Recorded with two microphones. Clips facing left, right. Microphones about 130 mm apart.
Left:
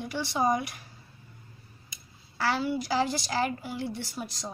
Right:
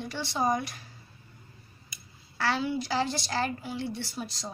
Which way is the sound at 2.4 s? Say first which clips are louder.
Left 1 dB; 5° left (ahead or behind).